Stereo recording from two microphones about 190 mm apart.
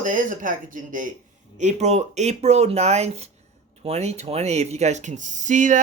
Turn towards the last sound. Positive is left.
turn(degrees=-40)  # may be behind; listen again after turning